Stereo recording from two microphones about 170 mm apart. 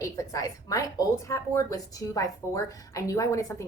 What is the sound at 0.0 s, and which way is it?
A woman's voice, 20° left (ahead or behind).